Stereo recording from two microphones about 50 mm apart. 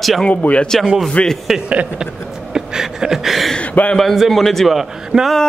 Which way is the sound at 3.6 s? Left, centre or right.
Left.